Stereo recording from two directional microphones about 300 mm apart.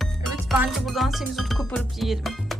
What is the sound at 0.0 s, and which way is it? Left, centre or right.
Music, centre.